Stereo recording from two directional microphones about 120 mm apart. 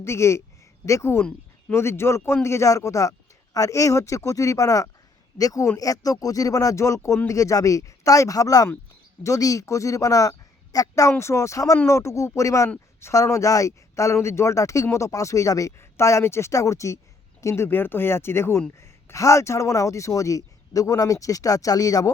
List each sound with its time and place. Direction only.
0.0 s speech: 25° left (ahead or behind)